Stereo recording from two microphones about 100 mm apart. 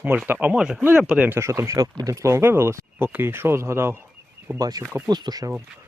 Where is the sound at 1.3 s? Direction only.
30° right (ahead or behind).